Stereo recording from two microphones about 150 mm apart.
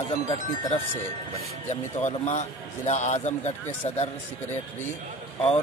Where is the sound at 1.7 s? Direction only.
50° left (ahead or behind).